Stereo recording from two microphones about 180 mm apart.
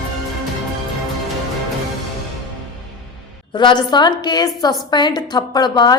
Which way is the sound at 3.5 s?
25° left (ahead or behind).